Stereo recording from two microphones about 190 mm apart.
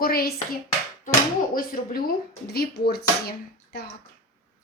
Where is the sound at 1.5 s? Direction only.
50° left (ahead or behind).